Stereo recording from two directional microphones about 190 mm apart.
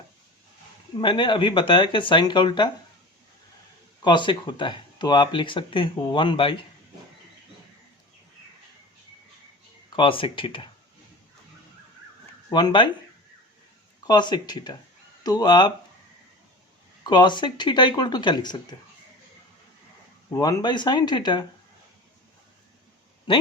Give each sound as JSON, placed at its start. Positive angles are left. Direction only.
{"t": 0.9, "sound": "speech", "side_deg": 25}
{"t": 4.0, "sound": "speech", "side_deg": 25}
{"t": 9.9, "sound": "speech", "side_deg": 25}
{"t": 12.5, "sound": "speech", "side_deg": 20}
{"t": 14.1, "sound": "speech", "side_deg": 25}
{"t": 17.0, "sound": "speech", "side_deg": 25}
{"t": 20.3, "sound": "speech", "side_deg": 20}